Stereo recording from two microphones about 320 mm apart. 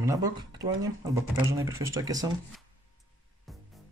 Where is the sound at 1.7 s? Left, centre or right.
Centre.